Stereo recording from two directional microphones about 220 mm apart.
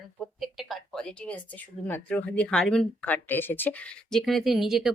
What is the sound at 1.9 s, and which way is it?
Speech, 10° left (ahead or behind).